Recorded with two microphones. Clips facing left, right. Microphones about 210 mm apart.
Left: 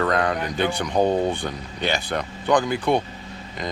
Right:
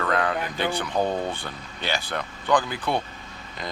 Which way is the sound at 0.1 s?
40° left (ahead or behind).